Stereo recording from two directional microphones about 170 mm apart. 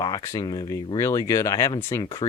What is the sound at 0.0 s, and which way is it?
Speech, 20° left (ahead or behind).